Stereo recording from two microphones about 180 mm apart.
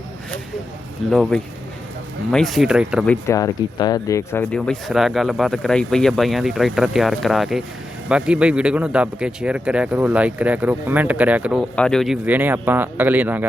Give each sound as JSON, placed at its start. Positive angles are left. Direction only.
{"t": 1.1, "sound": "speech", "side_deg": 5}
{"t": 3.1, "sound": "a man's voice", "side_deg": 15}
{"t": 11.8, "sound": "a man's voice", "side_deg": 5}